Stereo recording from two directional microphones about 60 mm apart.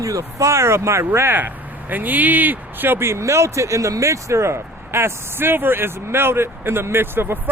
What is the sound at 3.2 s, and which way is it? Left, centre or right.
Speech, right.